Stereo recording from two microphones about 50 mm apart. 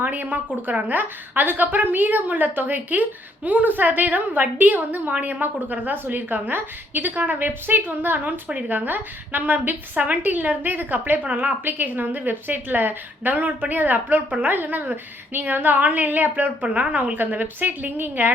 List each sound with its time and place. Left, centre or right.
0.0 s a woman's voice: right